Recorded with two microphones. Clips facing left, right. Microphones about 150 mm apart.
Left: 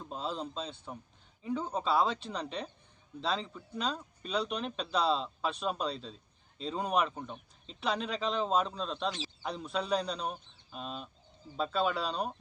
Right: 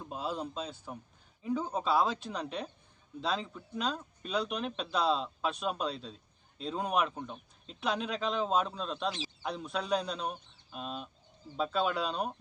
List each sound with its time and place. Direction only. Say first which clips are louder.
0.0 s a man's voice: right 1 dB; 10° right (ahead or behind)